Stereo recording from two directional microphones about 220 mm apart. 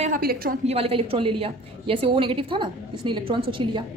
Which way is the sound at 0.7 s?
25° right (ahead or behind).